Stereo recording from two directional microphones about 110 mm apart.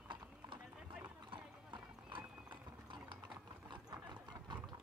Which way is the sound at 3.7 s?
45° right (ahead or behind).